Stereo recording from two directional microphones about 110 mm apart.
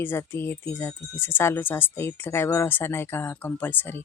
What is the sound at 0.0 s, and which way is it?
A woman's voice, 20° left (ahead or behind).